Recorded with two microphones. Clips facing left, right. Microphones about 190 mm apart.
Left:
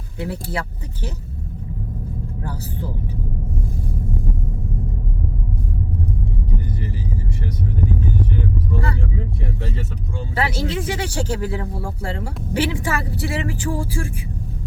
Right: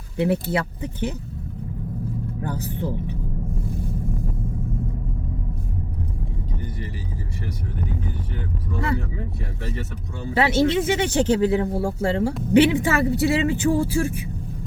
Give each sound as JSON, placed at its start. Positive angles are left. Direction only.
{"t": 0.2, "sound": "speech", "side_deg": -25}
{"t": 10.3, "sound": "speech", "side_deg": -25}